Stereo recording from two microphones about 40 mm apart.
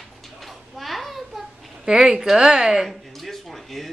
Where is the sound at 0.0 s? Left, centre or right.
Centre.